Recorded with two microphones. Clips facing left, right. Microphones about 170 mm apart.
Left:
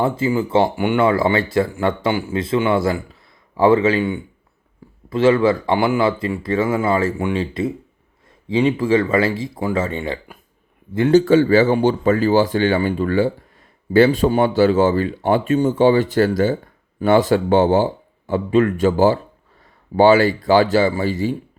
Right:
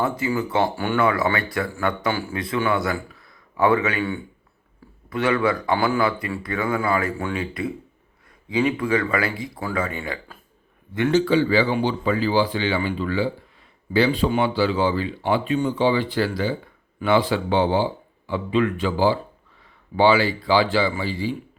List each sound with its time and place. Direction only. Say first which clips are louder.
0.0 s a man's voice: left 5 dB; 25° left (ahead or behind)
11.3 s speech: left 6 dB; 45° left (ahead or behind)